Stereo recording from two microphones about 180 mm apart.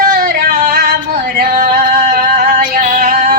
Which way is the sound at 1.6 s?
50° right (ahead or behind).